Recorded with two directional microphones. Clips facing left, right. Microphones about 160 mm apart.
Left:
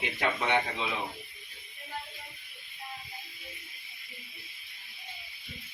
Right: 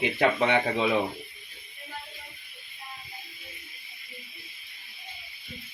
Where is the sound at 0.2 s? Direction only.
55° right (ahead or behind).